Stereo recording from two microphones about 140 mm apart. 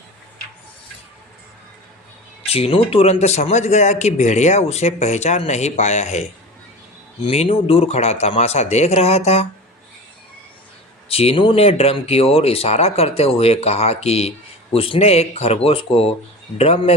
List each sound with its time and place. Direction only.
2.5 s speech: 45° left (ahead or behind)
7.3 s speech: 40° left (ahead or behind)
11.1 s speech: 45° left (ahead or behind)